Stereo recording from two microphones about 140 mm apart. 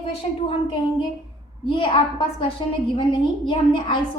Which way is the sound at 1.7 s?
35° left (ahead or behind).